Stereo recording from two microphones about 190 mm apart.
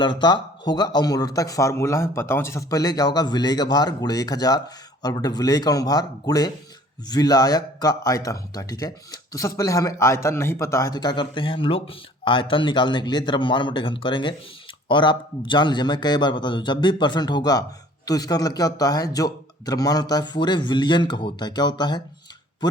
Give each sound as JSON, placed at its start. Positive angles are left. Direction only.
{"t": 0.0, "sound": "a man's voice", "side_deg": 25}